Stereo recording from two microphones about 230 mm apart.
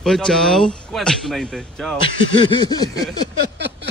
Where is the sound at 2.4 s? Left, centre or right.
Centre.